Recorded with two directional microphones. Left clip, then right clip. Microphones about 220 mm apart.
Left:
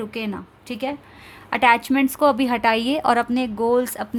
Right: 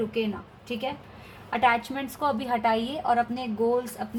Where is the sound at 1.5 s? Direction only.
45° left (ahead or behind).